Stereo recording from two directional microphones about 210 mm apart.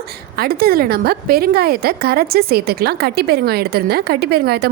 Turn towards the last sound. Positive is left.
turn(degrees=-50)  # may be behind; listen again after turning